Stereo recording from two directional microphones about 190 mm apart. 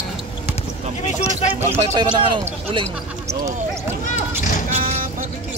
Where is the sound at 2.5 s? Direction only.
35° right (ahead or behind).